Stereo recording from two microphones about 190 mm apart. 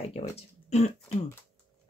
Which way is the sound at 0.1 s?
35° left (ahead or behind).